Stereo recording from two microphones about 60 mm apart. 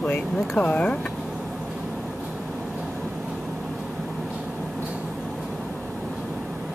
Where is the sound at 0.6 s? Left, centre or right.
Left.